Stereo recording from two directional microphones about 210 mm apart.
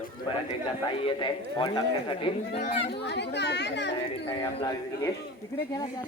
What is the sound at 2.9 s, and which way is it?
Speech, 50° left (ahead or behind).